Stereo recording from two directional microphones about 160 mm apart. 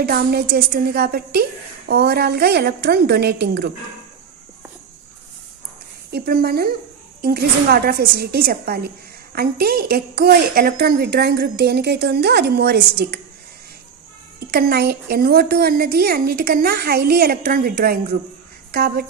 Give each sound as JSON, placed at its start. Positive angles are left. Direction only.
{"t": 0.0, "sound": "a woman's voice", "side_deg": -70}
{"t": 6.1, "sound": "a woman's voice", "side_deg": -75}
{"t": 14.5, "sound": "a woman's voice", "side_deg": -75}